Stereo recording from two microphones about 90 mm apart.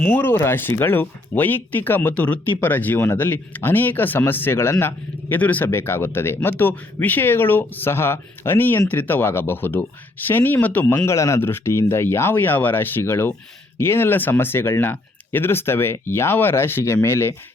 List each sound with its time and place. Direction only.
0.0 s speech: 20° left (ahead or behind)